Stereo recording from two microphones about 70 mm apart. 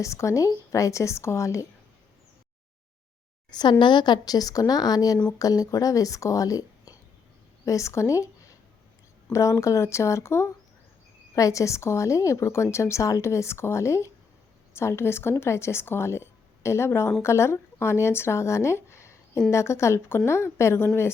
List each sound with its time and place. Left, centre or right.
0.0 s speech: left
3.5 s speech: left
9.3 s speech: left
11.3 s speech: left